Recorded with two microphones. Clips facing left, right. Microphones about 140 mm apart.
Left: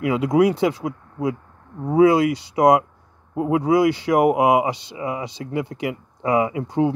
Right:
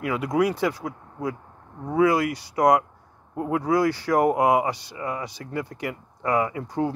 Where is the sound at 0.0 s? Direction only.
20° left (ahead or behind).